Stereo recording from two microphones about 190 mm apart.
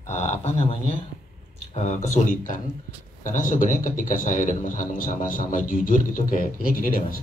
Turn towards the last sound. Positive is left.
turn(degrees=50)  # may be behind; listen again after turning